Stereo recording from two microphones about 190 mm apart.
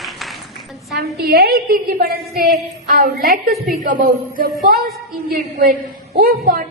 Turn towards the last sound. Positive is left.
turn(degrees=-50)  # may be behind; listen again after turning